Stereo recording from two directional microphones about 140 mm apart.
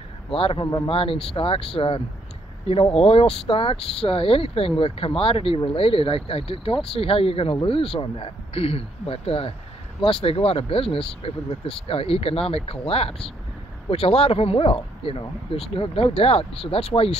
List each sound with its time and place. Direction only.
0.3 s speech: 40° left (ahead or behind)